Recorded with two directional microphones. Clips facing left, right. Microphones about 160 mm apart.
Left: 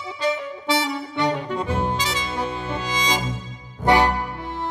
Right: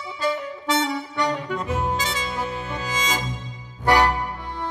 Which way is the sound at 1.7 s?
Centre (ahead or behind).